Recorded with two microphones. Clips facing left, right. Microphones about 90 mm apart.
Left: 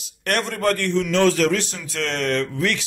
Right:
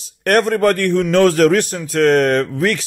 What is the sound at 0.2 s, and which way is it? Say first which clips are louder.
A man's voice: right 8 dB; 50° right (ahead or behind).